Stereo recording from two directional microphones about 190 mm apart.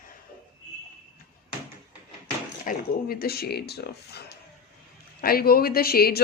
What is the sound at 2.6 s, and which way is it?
Speech, 50° left (ahead or behind).